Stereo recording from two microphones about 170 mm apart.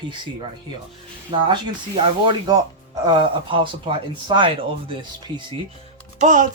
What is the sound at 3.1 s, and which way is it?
Speech, 30° right (ahead or behind).